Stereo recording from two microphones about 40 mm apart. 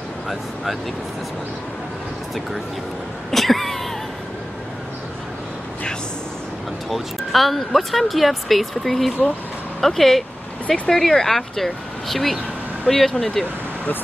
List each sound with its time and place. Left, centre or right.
3.3 s cat: centre
6.9 s speech: centre